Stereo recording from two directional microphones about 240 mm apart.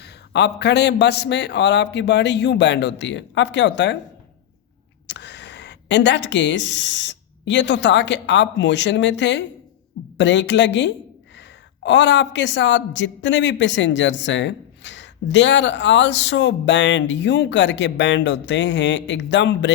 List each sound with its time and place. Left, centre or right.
0.0 s speech: left
5.0 s speech: left